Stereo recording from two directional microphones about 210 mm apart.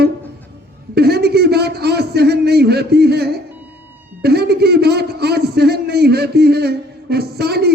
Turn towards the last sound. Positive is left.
turn(degrees=-50)  # may be behind; listen again after turning